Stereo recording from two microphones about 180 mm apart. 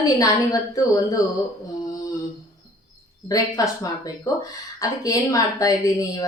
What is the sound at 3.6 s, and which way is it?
A woman's voice, 20° left (ahead or behind).